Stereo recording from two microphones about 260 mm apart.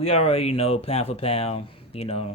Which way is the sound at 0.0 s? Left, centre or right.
Left.